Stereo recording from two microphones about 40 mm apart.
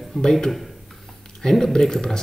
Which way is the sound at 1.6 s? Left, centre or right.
Centre.